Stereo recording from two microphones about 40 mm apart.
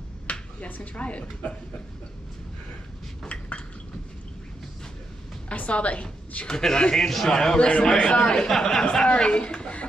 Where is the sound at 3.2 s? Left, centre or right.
Left.